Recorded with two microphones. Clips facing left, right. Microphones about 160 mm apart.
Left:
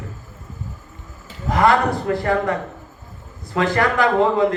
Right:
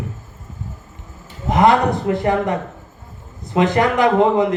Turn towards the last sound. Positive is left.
turn(degrees=-20)  # may be behind; listen again after turning